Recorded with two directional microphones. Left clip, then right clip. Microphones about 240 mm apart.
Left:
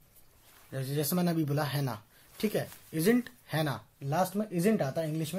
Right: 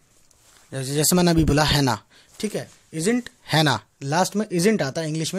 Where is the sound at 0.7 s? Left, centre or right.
Right.